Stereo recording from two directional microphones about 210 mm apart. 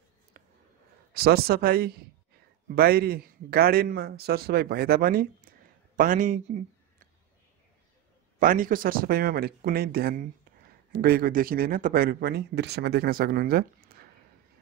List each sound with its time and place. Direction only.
0.3 s a sound: 45° right (ahead or behind)
1.1 s speech: 50° right (ahead or behind)
8.4 s speech: 40° right (ahead or behind)